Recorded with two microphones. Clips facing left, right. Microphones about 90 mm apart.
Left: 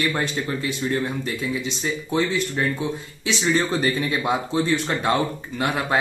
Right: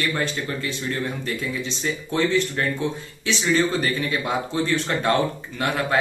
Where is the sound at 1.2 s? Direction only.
15° left (ahead or behind).